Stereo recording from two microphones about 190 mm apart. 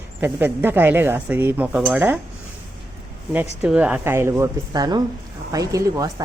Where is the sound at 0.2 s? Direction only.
10° right (ahead or behind).